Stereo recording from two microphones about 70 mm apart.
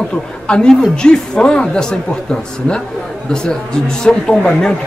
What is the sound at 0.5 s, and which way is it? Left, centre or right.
Speech, centre.